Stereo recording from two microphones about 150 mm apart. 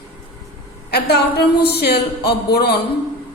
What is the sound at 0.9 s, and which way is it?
A woman's voice, 90° left.